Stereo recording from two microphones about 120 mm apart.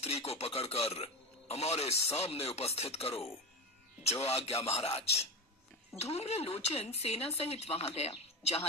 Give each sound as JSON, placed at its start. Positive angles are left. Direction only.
{"t": 0.0, "sound": "speech", "side_deg": 60}